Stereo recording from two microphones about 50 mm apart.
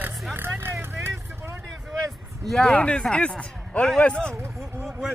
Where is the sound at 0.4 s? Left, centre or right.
Right.